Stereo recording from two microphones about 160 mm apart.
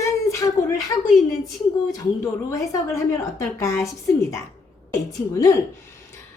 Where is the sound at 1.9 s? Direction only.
20° left (ahead or behind).